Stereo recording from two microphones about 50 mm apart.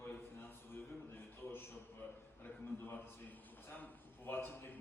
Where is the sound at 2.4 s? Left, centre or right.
Left.